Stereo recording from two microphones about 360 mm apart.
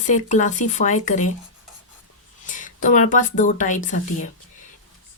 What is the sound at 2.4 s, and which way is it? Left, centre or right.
Speech, left.